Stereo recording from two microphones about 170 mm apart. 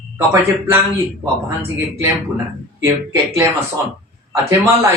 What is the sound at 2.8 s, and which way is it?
A man's voice, 15° right (ahead or behind).